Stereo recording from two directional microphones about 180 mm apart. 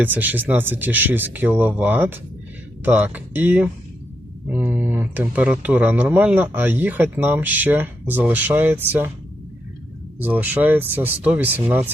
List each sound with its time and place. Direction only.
0.0 s speech: 10° right (ahead or behind)
10.2 s speech: 10° right (ahead or behind)